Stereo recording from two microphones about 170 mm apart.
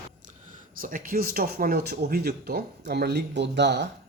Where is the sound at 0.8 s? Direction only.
55° right (ahead or behind); by 3.9 s 85° right.